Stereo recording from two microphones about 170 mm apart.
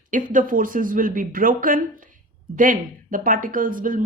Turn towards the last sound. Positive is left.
turn(degrees=-55)  # may be behind; listen again after turning